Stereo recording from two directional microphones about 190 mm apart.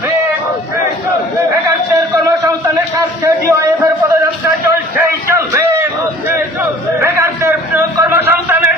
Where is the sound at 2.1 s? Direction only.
15° right (ahead or behind).